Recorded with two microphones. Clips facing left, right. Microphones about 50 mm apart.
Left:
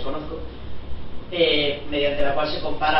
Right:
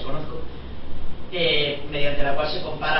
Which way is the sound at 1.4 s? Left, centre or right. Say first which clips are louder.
Left 3 dB; centre.